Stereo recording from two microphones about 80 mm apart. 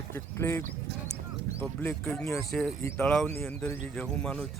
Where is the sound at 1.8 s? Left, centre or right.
Left.